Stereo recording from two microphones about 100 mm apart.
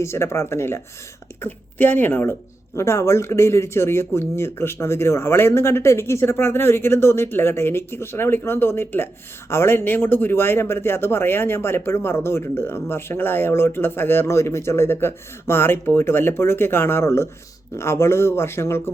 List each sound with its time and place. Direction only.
0.0 s speech: 25° left (ahead or behind)